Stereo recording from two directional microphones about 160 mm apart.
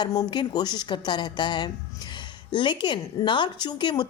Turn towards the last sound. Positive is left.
turn(degrees=25)  # may be behind; listen again after turning